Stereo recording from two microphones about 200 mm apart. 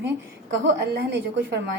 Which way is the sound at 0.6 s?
60° right (ahead or behind).